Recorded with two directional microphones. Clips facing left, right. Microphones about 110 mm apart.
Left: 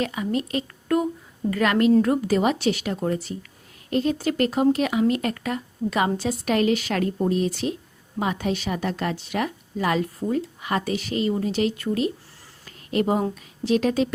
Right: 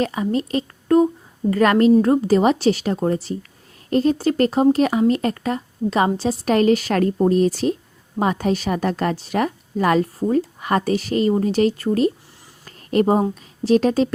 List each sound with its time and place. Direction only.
0.0 s speech: 35° right (ahead or behind)
12.6 s a sound: 40° right (ahead or behind)
13.7 s speech: 35° right (ahead or behind)